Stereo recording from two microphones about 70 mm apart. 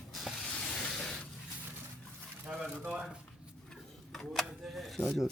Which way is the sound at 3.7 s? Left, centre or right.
Centre.